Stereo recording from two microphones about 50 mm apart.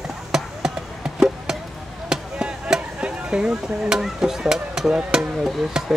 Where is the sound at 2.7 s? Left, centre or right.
Centre.